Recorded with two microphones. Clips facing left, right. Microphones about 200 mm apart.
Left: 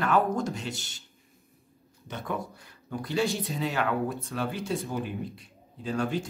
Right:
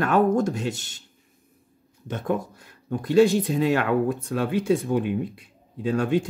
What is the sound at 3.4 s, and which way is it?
Speech, 55° right (ahead or behind).